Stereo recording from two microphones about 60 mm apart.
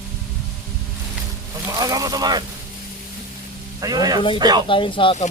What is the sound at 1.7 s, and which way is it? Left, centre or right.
Speech, right.